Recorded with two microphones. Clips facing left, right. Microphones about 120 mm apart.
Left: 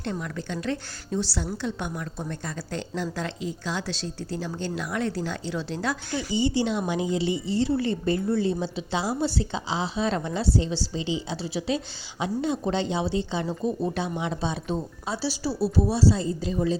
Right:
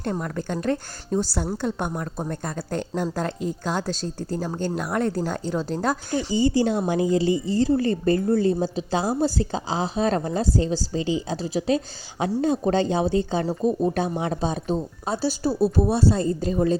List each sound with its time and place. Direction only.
0.0 s a woman's voice: 45° right (ahead or behind)